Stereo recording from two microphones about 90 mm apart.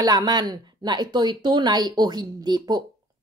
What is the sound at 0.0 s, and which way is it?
A woman's voice, 45° right (ahead or behind).